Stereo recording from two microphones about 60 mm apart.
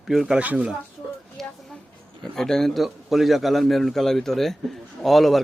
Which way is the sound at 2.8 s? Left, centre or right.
Centre.